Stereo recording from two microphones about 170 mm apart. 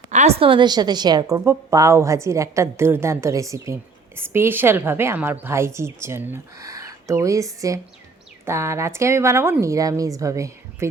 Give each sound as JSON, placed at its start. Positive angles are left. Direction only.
{"t": 0.1, "sound": "a woman's voice", "side_deg": -40}